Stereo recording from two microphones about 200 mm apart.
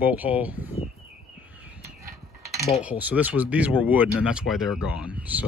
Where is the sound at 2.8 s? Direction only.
5° right (ahead or behind).